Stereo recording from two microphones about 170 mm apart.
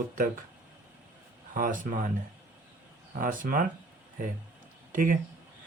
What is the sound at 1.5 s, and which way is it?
Speech, 50° right (ahead or behind).